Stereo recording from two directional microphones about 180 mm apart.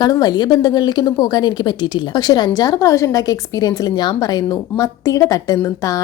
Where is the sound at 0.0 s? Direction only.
20° left (ahead or behind).